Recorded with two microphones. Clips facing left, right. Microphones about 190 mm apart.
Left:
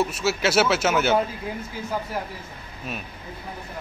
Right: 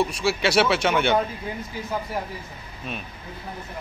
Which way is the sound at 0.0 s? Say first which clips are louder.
Even; 5° left (ahead or behind).